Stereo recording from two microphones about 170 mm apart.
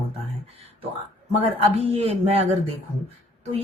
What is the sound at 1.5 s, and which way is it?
A woman's voice, 35° right (ahead or behind).